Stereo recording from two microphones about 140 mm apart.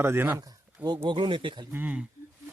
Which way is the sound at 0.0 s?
15° right (ahead or behind).